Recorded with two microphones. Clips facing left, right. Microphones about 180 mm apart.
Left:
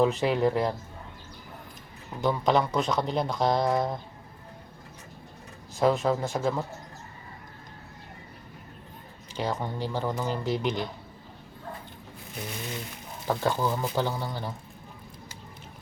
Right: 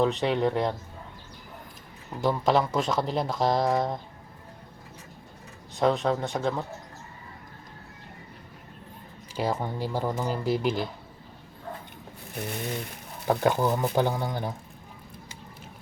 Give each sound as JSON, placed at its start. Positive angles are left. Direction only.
{"t": 0.0, "sound": "speech", "side_deg": 5}
{"t": 2.2, "sound": "speech", "side_deg": 0}
{"t": 5.7, "sound": "speech", "side_deg": 0}
{"t": 9.3, "sound": "speech", "side_deg": -10}
{"t": 13.2, "sound": "speech", "side_deg": -15}